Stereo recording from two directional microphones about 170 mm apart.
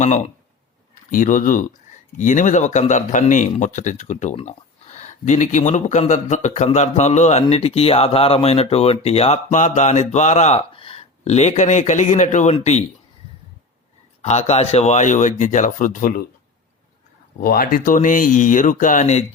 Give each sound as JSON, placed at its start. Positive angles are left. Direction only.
{"t": 1.1, "sound": "speech", "side_deg": 50}
{"t": 14.2, "sound": "speech", "side_deg": 40}
{"t": 17.4, "sound": "speech", "side_deg": 60}